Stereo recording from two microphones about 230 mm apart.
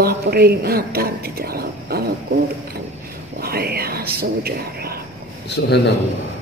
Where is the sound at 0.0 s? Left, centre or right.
Right.